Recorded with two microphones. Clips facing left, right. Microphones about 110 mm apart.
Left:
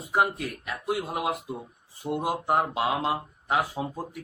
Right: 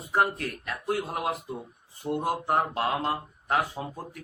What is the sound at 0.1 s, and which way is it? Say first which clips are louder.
A man's voice: even; 5° left (ahead or behind).